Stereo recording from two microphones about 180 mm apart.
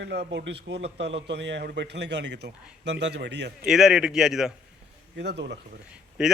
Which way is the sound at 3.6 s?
5° right (ahead or behind).